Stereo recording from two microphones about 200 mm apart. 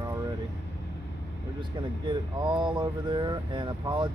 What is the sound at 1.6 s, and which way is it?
Speech, 25° right (ahead or behind).